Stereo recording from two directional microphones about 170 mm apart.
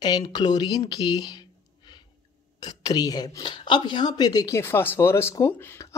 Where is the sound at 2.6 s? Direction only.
25° left (ahead or behind).